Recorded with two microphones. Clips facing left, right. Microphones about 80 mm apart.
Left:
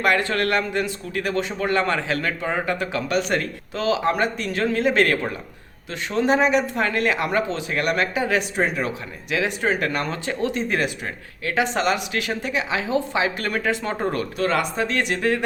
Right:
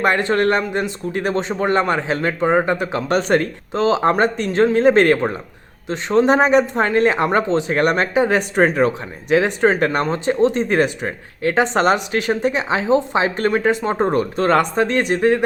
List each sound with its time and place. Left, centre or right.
0.0 s a man's voice: right
3.1 s speech: right
10.6 s speech: right
14.4 s speech: right